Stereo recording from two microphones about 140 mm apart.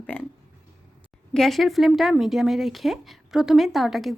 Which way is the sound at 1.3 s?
Centre (ahead or behind).